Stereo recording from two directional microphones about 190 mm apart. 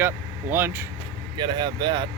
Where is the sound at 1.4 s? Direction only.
20° right (ahead or behind).